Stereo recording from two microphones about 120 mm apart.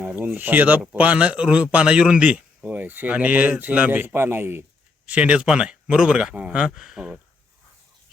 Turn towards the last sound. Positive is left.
turn(degrees=-5)  # may be behind; listen again after turning